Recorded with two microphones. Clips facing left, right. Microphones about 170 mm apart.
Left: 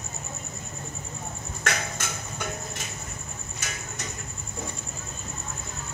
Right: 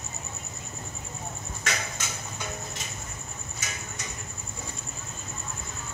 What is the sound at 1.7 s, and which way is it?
Music, 55° left (ahead or behind).